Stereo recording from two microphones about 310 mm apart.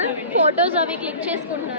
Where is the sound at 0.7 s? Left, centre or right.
Centre.